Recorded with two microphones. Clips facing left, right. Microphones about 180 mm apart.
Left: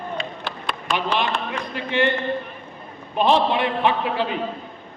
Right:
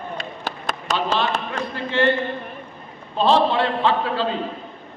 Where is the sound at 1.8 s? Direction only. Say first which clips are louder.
Right 1 dB; 15° left (ahead or behind).